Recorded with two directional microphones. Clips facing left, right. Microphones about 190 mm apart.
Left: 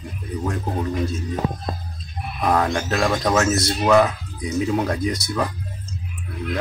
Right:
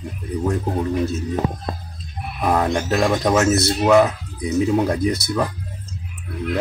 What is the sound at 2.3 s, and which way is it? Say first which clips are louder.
Speech: even; 5° right (ahead or behind).